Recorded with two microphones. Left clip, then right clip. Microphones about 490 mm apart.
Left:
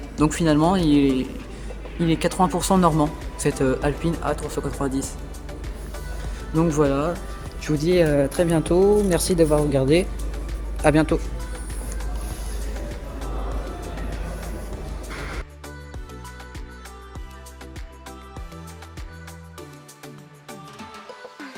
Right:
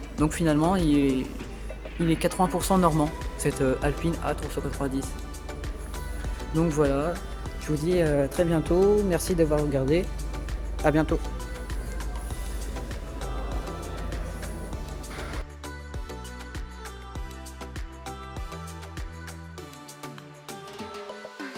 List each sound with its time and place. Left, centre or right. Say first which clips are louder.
0.2 s speech: left 5 dB; right
6.6 s speech: left 4 dB; right